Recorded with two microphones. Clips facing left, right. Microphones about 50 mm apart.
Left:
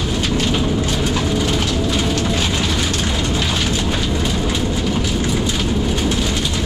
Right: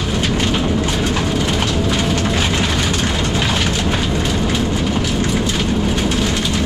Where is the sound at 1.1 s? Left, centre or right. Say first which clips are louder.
Even; right.